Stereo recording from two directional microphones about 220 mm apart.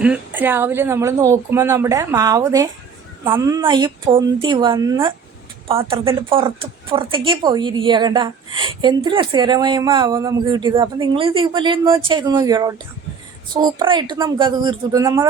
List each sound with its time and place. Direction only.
0.0 s a woman's voice: 5° right (ahead or behind)